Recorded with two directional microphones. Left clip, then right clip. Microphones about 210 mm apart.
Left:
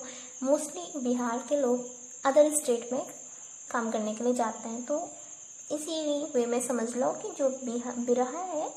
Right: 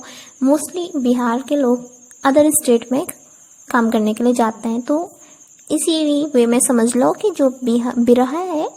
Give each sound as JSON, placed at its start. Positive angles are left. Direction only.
{"t": 0.0, "sound": "a woman's voice", "side_deg": -35}